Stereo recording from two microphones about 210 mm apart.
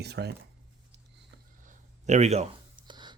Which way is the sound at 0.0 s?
50° right (ahead or behind).